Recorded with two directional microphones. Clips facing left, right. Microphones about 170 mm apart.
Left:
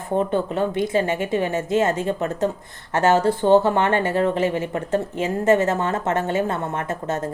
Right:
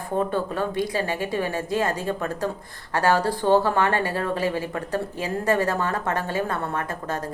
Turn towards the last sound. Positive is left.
turn(degrees=25)  # may be behind; listen again after turning